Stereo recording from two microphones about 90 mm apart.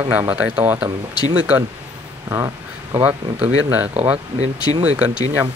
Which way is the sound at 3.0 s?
20° right (ahead or behind).